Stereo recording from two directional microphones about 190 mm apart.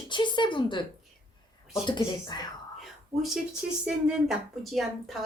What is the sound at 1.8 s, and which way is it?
Speech, 25° left (ahead or behind).